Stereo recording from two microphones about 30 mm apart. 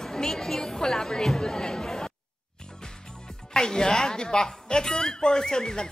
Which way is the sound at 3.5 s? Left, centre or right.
Left.